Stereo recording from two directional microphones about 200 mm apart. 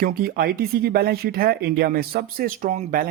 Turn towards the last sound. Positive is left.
turn(degrees=-40)  # may be behind; listen again after turning